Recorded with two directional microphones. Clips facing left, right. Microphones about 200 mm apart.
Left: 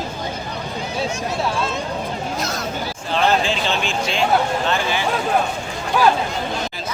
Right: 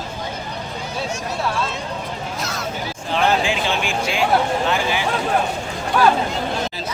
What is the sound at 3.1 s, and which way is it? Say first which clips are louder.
Speech: even; 15° right (ahead or behind).